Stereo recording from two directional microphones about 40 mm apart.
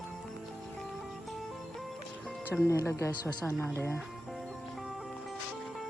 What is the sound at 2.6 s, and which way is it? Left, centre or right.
Speech, left.